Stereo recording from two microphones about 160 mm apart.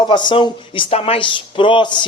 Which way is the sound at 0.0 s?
30° left (ahead or behind).